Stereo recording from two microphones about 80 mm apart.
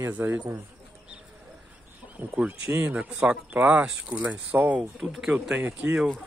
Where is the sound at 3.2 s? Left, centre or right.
Centre.